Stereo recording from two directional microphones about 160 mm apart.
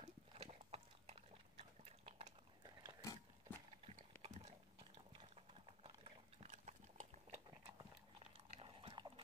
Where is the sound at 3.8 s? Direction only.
40° right (ahead or behind).